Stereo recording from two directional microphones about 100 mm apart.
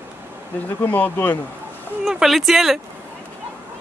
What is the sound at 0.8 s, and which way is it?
Speech, 20° left (ahead or behind).